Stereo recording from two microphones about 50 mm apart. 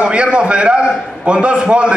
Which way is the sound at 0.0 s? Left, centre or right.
Right.